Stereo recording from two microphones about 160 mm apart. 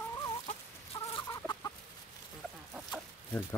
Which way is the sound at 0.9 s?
20° left (ahead or behind).